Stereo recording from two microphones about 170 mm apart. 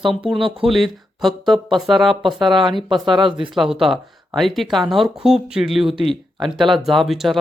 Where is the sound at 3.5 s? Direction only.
Centre (ahead or behind).